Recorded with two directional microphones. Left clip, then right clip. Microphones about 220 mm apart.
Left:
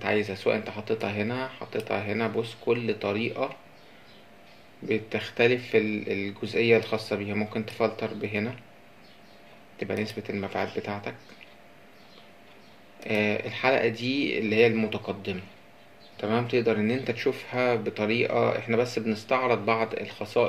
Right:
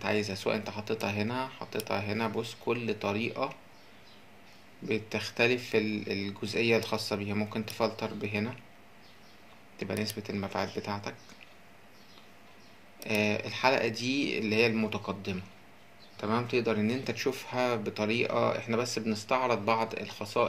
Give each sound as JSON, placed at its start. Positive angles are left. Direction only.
{"t": 0.0, "sound": "speech", "side_deg": -30}
{"t": 4.8, "sound": "speech", "side_deg": -30}
{"t": 9.8, "sound": "speech", "side_deg": -30}
{"t": 13.0, "sound": "speech", "side_deg": -30}